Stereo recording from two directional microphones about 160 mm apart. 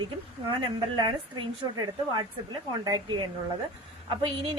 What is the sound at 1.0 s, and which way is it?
A woman's voice, 30° right (ahead or behind).